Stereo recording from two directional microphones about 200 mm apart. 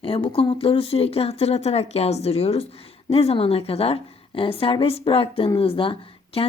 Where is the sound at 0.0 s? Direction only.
30° left (ahead or behind).